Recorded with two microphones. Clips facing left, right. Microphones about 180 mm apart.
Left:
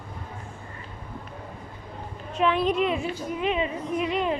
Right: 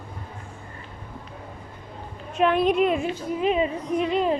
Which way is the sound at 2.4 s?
55° right (ahead or behind).